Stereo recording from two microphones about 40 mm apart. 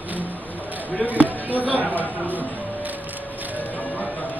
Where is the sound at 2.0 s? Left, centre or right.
Left.